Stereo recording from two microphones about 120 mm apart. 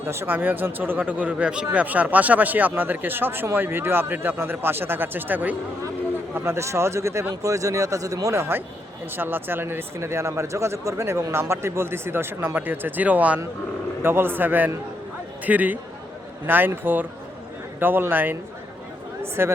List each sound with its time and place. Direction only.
0.0 s speech: 20° right (ahead or behind)